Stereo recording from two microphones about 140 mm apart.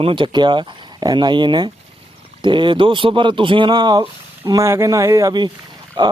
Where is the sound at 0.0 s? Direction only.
40° right (ahead or behind).